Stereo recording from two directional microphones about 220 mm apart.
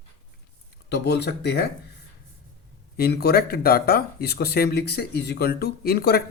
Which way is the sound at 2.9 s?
45° left (ahead or behind).